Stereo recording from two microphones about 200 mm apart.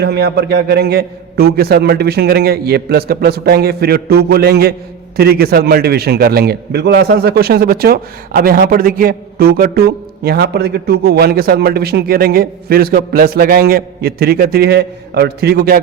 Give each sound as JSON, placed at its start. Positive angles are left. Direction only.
{"t": 0.0, "sound": "a man's voice", "side_deg": -55}